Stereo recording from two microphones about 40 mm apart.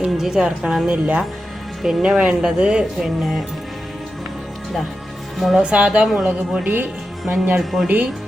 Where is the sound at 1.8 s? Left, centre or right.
Centre.